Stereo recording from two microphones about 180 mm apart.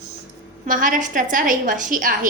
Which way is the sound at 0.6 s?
45° right (ahead or behind).